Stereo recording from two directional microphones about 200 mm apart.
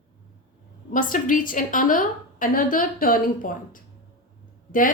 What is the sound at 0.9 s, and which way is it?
A woman's voice, 40° left (ahead or behind).